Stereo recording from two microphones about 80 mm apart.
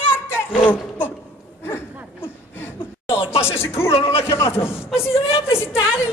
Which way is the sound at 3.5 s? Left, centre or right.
Left.